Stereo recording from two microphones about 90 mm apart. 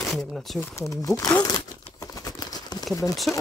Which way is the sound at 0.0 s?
Centre (ahead or behind).